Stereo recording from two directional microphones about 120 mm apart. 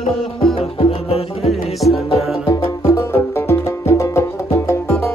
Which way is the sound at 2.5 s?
30° left (ahead or behind).